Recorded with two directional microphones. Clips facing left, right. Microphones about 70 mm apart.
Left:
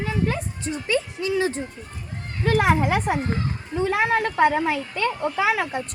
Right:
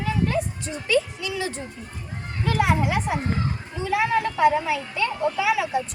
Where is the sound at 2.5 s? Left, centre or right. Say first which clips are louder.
Left 3 dB; left.